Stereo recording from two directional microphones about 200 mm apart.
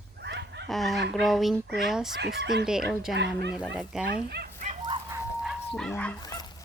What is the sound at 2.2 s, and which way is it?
Speech, 60° right (ahead or behind).